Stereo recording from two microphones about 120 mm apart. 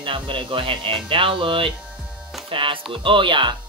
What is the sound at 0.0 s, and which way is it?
Speech, 45° right (ahead or behind).